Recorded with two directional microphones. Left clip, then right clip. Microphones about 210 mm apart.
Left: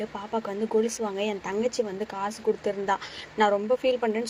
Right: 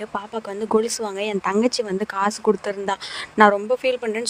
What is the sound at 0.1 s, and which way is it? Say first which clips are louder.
Speech: right 3 dB; 45° right (ahead or behind).